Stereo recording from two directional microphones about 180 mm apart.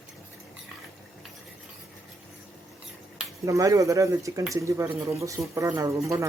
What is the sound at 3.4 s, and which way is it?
Speech, 15° right (ahead or behind).